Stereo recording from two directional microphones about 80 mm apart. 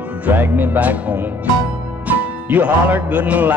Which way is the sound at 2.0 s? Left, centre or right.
Right.